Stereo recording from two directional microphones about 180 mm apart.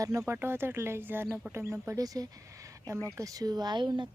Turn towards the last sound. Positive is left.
turn(degrees=-25)  # may be behind; listen again after turning